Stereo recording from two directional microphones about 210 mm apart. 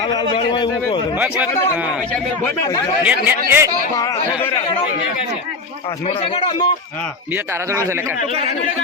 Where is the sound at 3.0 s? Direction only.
10° right (ahead or behind).